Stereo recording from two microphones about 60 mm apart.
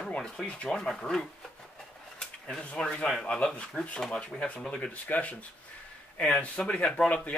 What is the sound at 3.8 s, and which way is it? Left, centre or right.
Speech, left.